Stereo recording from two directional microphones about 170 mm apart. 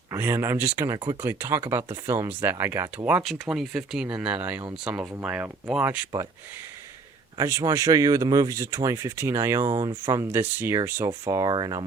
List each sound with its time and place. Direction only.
0.1 s speech: 15° right (ahead or behind)
7.3 s speech: 20° right (ahead or behind)